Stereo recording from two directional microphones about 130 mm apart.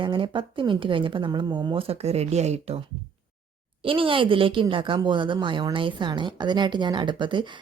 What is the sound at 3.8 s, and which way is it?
Speech, 45° right (ahead or behind).